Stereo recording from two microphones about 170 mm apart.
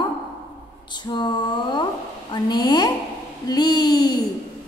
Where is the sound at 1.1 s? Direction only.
25° left (ahead or behind).